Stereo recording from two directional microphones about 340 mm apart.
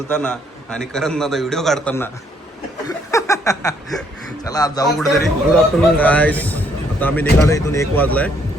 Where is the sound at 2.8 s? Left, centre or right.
Centre.